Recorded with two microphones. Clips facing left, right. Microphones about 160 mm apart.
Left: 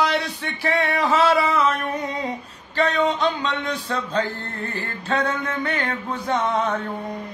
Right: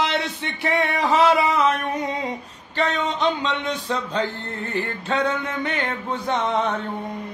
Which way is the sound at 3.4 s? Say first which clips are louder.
Even; 20° right (ahead or behind).